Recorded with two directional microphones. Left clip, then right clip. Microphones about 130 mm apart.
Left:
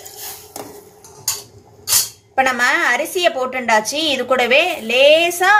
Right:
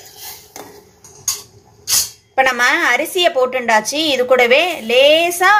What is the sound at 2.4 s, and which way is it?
Speech, 15° right (ahead or behind).